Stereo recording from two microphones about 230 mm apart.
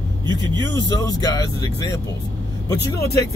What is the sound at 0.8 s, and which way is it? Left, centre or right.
Speech, centre.